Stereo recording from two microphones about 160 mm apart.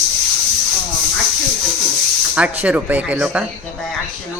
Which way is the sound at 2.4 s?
10° right (ahead or behind).